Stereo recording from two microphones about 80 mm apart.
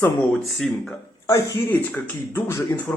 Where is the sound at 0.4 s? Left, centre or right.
Centre.